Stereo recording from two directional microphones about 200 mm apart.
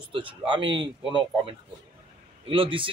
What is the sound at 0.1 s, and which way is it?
Speech, 25° right (ahead or behind).